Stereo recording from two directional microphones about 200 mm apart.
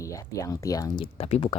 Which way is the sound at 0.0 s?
15° left (ahead or behind).